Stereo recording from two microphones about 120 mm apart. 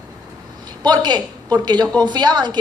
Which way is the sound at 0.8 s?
35° right (ahead or behind).